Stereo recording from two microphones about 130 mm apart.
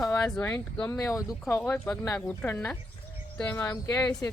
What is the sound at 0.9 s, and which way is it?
Speech, 25° left (ahead or behind).